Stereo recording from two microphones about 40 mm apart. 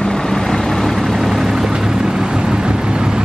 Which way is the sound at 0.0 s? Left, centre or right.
Centre.